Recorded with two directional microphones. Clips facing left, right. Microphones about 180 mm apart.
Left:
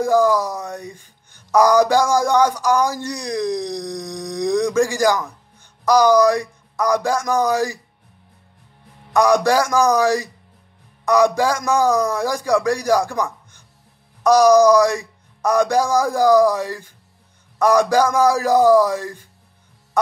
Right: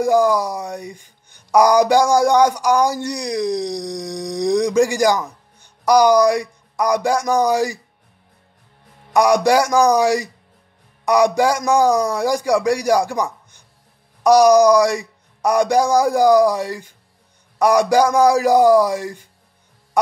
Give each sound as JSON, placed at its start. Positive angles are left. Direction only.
{"t": 0.0, "sound": "speech", "side_deg": -15}
{"t": 9.1, "sound": "speech", "side_deg": -15}